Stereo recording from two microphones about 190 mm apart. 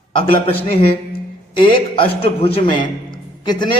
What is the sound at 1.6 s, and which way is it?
A man's voice, 25° left (ahead or behind).